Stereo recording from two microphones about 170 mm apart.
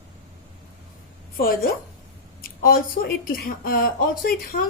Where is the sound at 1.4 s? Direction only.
65° left (ahead or behind).